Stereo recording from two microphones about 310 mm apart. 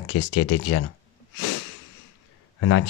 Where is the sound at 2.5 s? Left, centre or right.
Left.